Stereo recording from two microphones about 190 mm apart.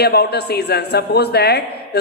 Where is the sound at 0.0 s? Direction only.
60° left (ahead or behind).